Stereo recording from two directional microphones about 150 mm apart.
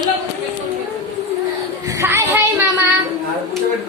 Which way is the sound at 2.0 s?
15° right (ahead or behind).